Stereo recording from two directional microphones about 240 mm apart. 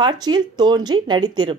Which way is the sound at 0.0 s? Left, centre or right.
Centre.